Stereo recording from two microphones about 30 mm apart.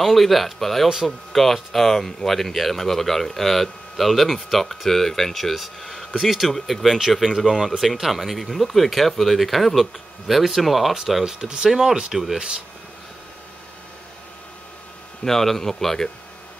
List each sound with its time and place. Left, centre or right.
0.0 s speech: centre
4.6 s speech: centre
7.3 s speech: centre
11.2 s speech: right
12.1 s speech: centre
15.2 s speech: centre